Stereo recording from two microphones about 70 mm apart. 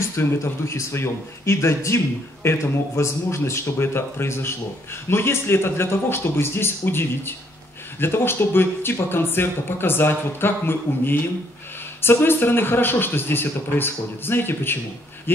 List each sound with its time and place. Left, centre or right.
0.1 s speech: left